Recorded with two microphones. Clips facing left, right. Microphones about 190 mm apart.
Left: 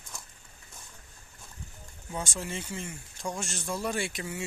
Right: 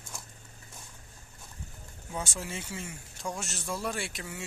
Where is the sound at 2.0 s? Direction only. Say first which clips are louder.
Left 1 dB; 5° right (ahead or behind).